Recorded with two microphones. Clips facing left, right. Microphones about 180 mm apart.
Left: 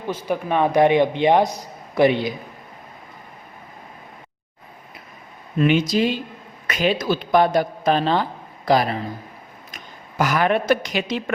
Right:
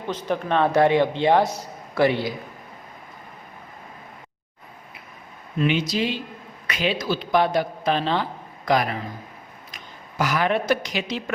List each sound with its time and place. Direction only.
0.1 s a man's voice: 10° left (ahead or behind)
5.5 s a man's voice: 50° left (ahead or behind); by 9.0 s 30° left (ahead or behind)
9.7 s speech: 50° left (ahead or behind)